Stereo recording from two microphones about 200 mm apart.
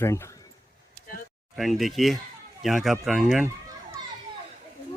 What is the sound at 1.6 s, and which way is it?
Speech, centre (ahead or behind).